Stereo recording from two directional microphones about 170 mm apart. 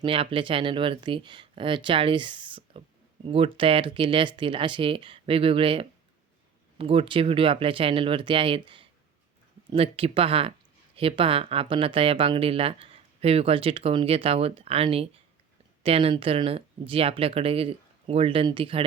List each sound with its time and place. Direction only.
0.0 s speech: 30° right (ahead or behind)